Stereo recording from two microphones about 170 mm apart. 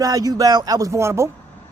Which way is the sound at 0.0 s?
20° right (ahead or behind).